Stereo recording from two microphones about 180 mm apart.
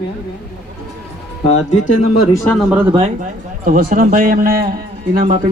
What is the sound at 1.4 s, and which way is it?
Speech, 40° left (ahead or behind).